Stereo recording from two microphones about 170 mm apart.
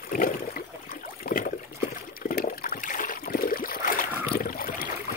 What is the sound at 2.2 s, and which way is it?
Water, 55° left (ahead or behind).